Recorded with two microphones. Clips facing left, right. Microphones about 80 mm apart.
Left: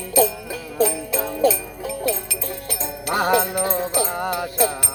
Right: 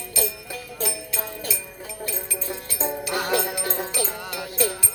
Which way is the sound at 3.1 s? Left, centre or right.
Left.